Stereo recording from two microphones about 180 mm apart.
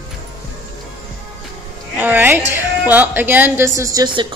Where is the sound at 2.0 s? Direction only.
10° right (ahead or behind).